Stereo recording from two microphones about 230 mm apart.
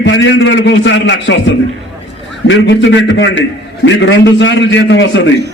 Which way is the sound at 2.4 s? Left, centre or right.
Left.